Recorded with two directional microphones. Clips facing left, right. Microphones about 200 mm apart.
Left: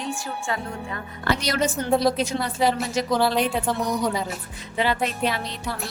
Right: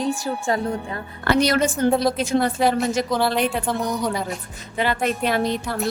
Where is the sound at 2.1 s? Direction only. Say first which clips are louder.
Right 4 dB; 50° right (ahead or behind).